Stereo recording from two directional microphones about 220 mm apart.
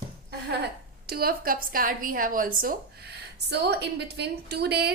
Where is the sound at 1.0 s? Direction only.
45° right (ahead or behind).